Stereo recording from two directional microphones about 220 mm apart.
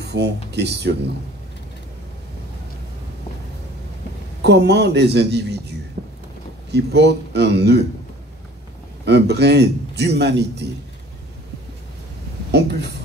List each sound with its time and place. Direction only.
0.0 s speech: 50° right (ahead or behind)
4.4 s a man's voice: 50° right (ahead or behind)
6.0 s a sound: 40° right (ahead or behind)
6.7 s a man's voice: 50° right (ahead or behind)
9.0 s a man's voice: 50° right (ahead or behind)
12.4 s a sound: 50° right (ahead or behind)